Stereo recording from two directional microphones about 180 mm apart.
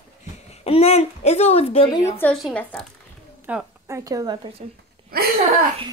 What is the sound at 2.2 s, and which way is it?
Speech, centre (ahead or behind).